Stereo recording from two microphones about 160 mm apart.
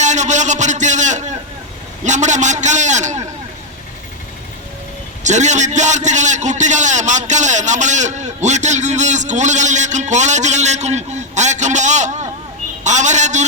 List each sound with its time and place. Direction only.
0.0 s a sound: 50° right (ahead or behind)
2.0 s a man's voice: 50° right (ahead or behind)
5.2 s a man's voice: 50° right (ahead or behind)